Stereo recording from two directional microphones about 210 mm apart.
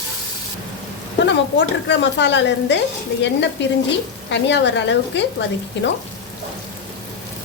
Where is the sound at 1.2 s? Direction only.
55° left (ahead or behind).